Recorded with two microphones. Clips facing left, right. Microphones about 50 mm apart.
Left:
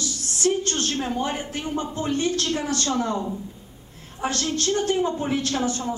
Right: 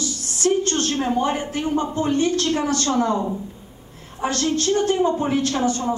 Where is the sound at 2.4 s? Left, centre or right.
Centre.